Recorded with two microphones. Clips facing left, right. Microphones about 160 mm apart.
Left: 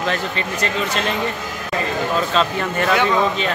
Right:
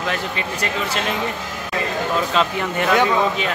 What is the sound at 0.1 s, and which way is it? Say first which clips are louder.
Speech: left 2 dB; 10° right (ahead or behind).